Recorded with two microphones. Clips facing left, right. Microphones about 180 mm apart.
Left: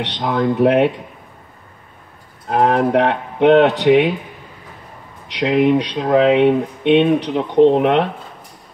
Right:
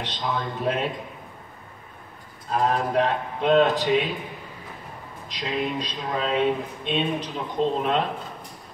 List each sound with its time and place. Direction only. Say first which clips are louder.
0.0 s speech: left 10 dB; 65° left (ahead or behind)
2.4 s speech: left 8 dB; 65° left (ahead or behind)
5.3 s speech: left 13 dB; 65° left (ahead or behind)